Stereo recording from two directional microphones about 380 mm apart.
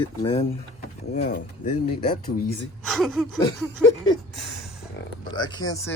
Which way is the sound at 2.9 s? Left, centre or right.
Centre.